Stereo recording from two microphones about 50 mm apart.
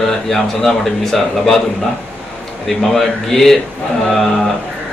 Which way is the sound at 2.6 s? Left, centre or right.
Centre.